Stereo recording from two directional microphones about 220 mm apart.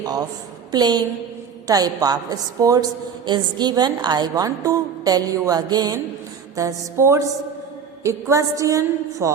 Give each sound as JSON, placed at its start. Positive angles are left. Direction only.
{"t": 0.0, "sound": "a woman's voice", "side_deg": -15}